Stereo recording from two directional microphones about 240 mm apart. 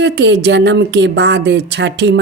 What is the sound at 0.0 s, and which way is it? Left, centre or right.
A woman's voice, right.